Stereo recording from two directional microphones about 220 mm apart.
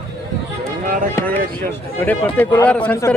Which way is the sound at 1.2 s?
10° left (ahead or behind).